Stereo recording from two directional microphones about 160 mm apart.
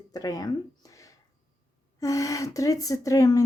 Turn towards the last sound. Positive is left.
turn(degrees=20)  # may be behind; listen again after turning